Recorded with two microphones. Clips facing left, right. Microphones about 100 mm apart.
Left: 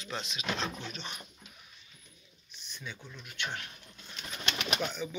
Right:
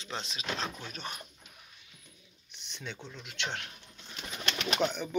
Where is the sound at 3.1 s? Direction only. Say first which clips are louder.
Even; 80° right.